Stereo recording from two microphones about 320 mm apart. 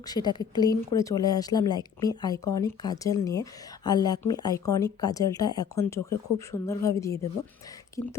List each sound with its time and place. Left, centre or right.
0.1 s speech: centre
8.0 s speech: left